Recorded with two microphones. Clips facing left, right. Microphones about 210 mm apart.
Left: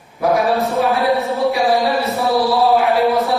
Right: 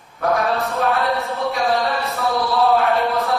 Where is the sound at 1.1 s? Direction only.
15° left (ahead or behind).